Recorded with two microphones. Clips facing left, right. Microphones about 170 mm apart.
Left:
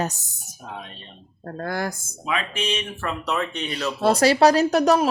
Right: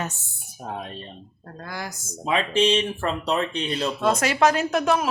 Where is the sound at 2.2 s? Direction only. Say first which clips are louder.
Right 6 dB; 30° right (ahead or behind).